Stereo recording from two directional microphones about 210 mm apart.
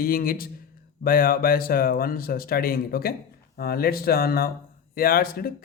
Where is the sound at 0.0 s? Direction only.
45° left (ahead or behind).